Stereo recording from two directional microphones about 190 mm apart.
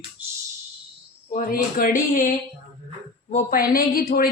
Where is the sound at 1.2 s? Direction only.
45° left (ahead or behind).